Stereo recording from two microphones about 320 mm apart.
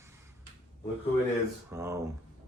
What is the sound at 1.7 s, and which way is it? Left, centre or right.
Speech, centre.